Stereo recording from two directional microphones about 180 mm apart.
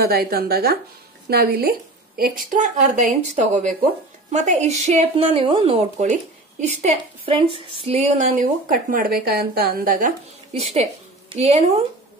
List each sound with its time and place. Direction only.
0.0 s a woman's voice: 60° right (ahead or behind); by 8.2 s 35° right (ahead or behind)
8.4 s speech: 50° right (ahead or behind)
10.5 s speech: 35° right (ahead or behind)